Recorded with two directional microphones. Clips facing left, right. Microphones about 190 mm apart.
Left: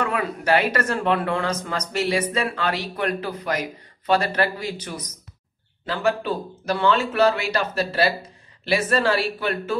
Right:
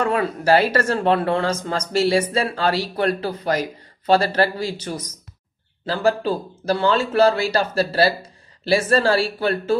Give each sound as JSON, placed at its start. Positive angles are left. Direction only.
{"t": 0.0, "sound": "speech", "side_deg": -30}